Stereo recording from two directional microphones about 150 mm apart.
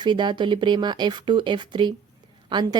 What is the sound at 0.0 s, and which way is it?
A woman's voice, 30° right (ahead or behind).